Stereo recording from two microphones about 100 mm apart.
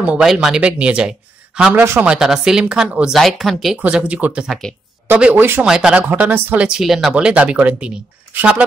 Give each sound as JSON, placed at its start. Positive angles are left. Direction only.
{"t": 0.2, "sound": "speech", "side_deg": -5}
{"t": 2.0, "sound": "speech", "side_deg": -5}
{"t": 3.7, "sound": "speech", "side_deg": -15}
{"t": 5.7, "sound": "speech", "side_deg": -10}